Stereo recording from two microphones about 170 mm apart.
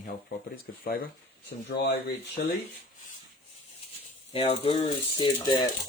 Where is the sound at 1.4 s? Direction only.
75° left (ahead or behind).